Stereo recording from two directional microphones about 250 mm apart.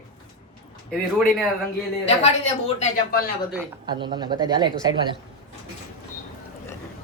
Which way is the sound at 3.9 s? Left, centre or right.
Centre.